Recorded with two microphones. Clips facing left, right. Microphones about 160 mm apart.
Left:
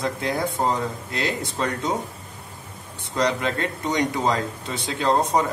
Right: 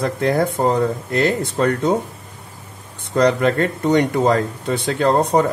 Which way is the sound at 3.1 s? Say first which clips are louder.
Right 8 dB; 55° right (ahead or behind).